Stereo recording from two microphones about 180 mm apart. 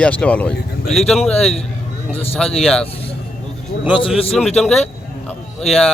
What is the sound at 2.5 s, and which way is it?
Speech, centre (ahead or behind).